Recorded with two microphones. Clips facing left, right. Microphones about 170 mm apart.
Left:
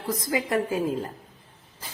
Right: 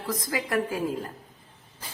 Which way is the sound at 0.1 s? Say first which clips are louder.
Left 3 dB; 20° left (ahead or behind).